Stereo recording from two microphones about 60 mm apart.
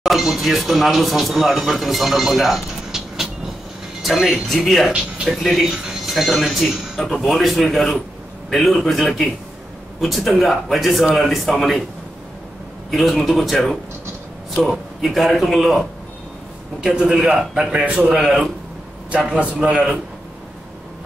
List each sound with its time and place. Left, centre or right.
0.0 s speech: centre
12.9 s speech: centre
16.8 s speech: centre
19.0 s a man's voice: right